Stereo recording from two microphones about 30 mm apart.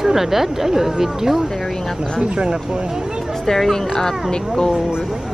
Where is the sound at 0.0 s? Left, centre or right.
Centre.